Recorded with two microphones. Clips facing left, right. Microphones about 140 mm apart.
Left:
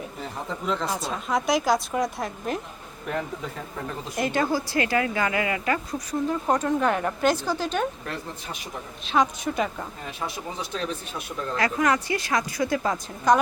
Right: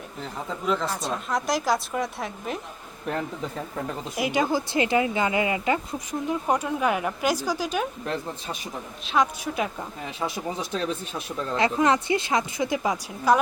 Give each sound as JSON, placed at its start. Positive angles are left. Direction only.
{"t": 0.7, "sound": "a woman's voice", "side_deg": 0}
{"t": 4.1, "sound": "speech", "side_deg": -10}
{"t": 9.1, "sound": "a woman's voice", "side_deg": 0}
{"t": 11.5, "sound": "speech", "side_deg": -25}